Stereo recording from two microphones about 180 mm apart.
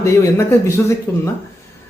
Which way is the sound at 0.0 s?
15° left (ahead or behind).